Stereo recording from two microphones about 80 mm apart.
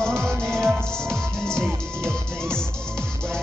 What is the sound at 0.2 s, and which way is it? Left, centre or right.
Music, centre.